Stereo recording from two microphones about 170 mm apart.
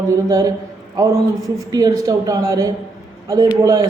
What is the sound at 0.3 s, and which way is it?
Speech, 20° right (ahead or behind).